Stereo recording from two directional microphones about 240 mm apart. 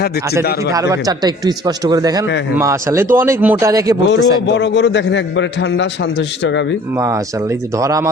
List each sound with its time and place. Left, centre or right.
0.7 s speech: centre
4.1 s a man's voice: left
6.9 s speech: centre